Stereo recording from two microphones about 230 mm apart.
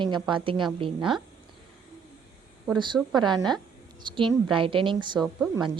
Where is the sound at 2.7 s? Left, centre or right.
Centre.